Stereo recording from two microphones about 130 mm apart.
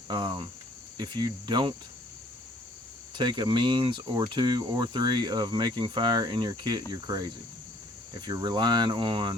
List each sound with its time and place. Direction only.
0.1 s cricket: 35° right (ahead or behind)
3.2 s cricket: 35° right (ahead or behind)